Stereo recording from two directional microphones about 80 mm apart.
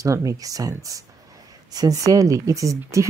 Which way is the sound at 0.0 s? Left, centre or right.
Right.